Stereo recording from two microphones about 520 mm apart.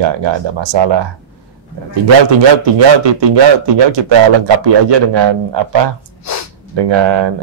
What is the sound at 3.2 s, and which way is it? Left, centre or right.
Speech, right.